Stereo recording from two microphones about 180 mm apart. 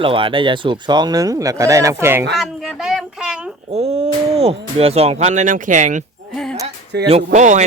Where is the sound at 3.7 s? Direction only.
35° right (ahead or behind).